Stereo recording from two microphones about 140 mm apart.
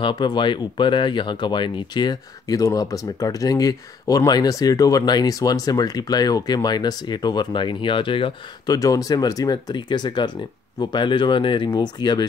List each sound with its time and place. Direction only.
0.0 s speech: 30° left (ahead or behind)
8.7 s speech: 25° left (ahead or behind)